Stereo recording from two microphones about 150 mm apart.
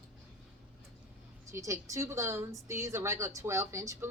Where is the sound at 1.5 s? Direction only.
20° right (ahead or behind).